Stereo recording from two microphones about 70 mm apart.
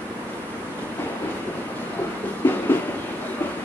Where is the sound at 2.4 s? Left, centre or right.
Left.